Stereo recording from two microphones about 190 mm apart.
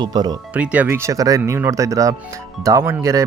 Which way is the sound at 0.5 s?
5° right (ahead or behind).